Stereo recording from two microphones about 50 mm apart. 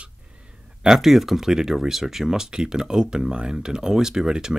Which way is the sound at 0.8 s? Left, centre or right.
Centre.